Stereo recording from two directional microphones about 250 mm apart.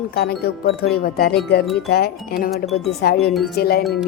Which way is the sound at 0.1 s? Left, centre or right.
Left.